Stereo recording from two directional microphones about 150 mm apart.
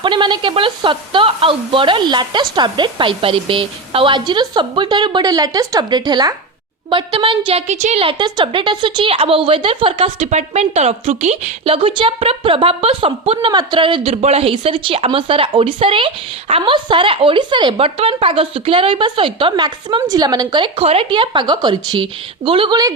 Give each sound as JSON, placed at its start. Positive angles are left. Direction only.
{"t": 0.0, "sound": "a woman's voice", "side_deg": -30}